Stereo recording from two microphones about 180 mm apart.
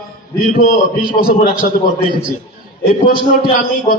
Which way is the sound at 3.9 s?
55° left (ahead or behind).